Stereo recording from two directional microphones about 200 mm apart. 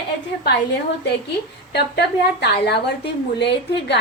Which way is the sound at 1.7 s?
55° left (ahead or behind).